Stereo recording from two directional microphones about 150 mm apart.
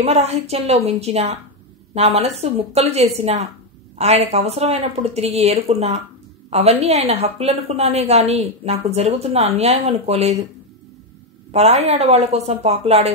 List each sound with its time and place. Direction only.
0.0 s a woman's voice: 45° right (ahead or behind)
11.5 s a woman's voice: 45° right (ahead or behind)